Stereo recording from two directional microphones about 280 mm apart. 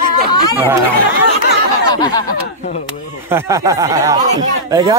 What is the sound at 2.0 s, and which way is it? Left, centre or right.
Speech, centre.